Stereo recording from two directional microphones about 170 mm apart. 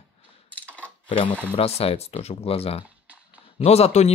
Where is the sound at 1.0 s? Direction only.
30° left (ahead or behind).